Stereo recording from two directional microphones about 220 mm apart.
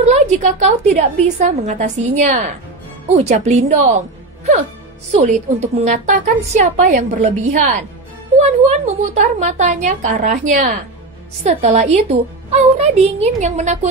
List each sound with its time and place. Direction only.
0.1 s a woman's voice: 35° right (ahead or behind)
5.1 s a woman's voice: 30° right (ahead or behind)
8.8 s a woman's voice: 30° right (ahead or behind)